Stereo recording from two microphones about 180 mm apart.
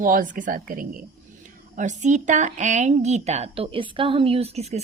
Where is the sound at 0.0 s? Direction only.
50° right (ahead or behind).